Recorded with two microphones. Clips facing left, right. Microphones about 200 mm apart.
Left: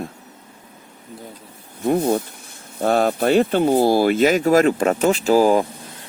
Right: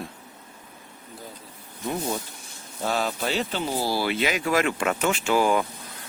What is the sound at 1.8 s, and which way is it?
Speech, 55° left (ahead or behind).